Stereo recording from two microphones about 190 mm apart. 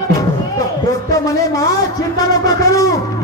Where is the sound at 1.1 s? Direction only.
15° left (ahead or behind).